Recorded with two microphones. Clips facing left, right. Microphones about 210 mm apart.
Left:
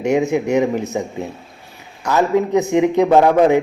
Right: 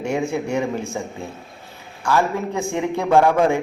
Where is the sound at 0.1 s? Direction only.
20° left (ahead or behind).